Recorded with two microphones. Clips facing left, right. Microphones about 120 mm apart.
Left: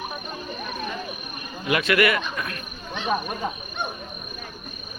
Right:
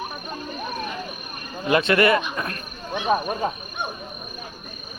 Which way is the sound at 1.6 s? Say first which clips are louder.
Right 3 dB; 30° right (ahead or behind).